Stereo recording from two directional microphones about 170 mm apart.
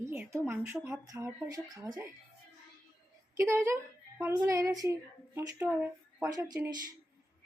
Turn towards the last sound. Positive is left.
turn(degrees=-20)  # may be behind; listen again after turning